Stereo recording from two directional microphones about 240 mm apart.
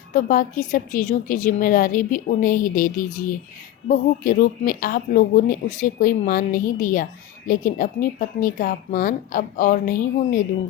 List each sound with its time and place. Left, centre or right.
0.1 s speech: left